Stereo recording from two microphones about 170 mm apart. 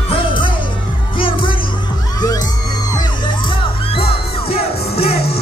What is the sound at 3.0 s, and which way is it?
Music, 30° left (ahead or behind).